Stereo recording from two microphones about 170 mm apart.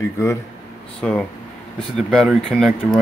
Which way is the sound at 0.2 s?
20° left (ahead or behind).